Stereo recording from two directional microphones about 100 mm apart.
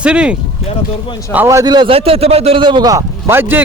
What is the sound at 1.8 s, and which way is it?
Speech, 75° right (ahead or behind).